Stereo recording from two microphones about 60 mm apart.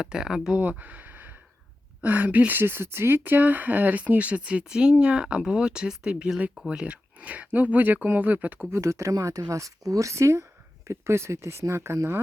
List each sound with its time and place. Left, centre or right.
0.0 s speech: centre
0.5 s a woman's voice: right
8.7 s speech: right
9.1 s speech: right